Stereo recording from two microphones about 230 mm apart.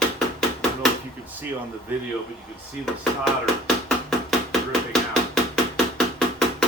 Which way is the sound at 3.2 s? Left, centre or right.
Centre.